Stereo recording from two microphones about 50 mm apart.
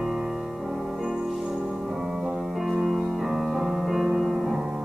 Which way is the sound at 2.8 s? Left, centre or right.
Centre.